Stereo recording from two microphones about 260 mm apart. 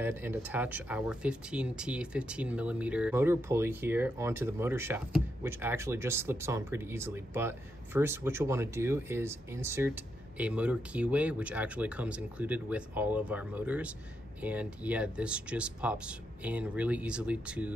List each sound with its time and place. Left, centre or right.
0.0 s speech: centre